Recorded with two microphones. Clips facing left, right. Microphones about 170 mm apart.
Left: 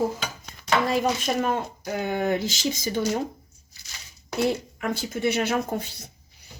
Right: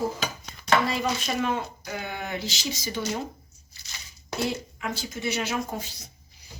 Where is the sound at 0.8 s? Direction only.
45° left (ahead or behind).